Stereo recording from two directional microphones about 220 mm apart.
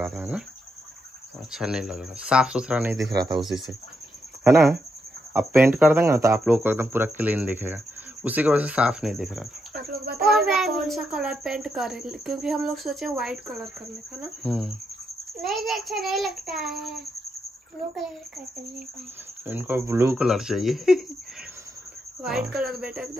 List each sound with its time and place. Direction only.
0.0 s a child's voice: 5° right (ahead or behind)
1.5 s a child's voice: 5° right (ahead or behind)
3.0 s speech: 50° right (ahead or behind)
3.3 s a child's voice: centre (ahead or behind)
5.4 s speech: 10° right (ahead or behind)
9.8 s a sound: 45° right (ahead or behind)
10.2 s a child's voice: centre (ahead or behind)
19.4 s a child's voice: 10° right (ahead or behind)
22.2 s a child's voice: centre (ahead or behind)